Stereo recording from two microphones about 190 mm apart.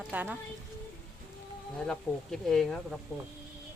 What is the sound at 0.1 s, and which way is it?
Speech, 10° right (ahead or behind).